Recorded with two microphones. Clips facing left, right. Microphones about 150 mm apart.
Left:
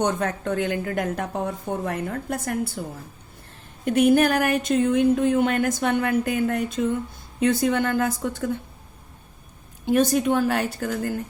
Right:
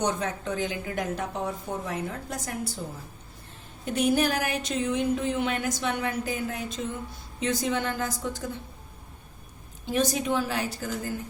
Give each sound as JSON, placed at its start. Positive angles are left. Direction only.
{"t": 0.0, "sound": "a woman's voice", "side_deg": 55}
{"t": 3.8, "sound": "a woman's voice", "side_deg": 55}
{"t": 9.8, "sound": "a woman's voice", "side_deg": 55}